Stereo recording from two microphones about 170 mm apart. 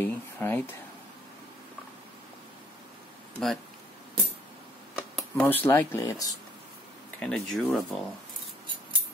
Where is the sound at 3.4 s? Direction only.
5° left (ahead or behind).